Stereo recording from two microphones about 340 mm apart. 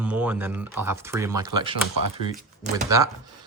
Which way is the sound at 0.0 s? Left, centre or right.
Centre.